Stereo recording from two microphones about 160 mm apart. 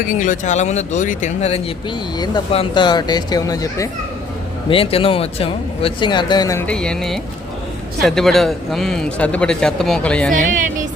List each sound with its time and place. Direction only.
0.0 s speech: 55° left (ahead or behind)
2.1 s speech: 25° left (ahead or behind)
4.7 s speech: 35° left (ahead or behind)
6.7 s speech: 5° left (ahead or behind)
10.3 s a woman's voice: 55° right (ahead or behind)